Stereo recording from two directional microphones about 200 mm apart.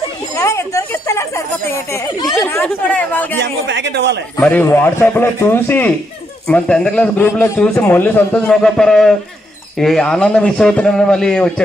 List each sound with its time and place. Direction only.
0.4 s a sound: 15° left (ahead or behind)
2.4 s speech: 10° left (ahead or behind)
3.3 s speech: 65° right (ahead or behind)
4.4 s a man's voice: 10° left (ahead or behind)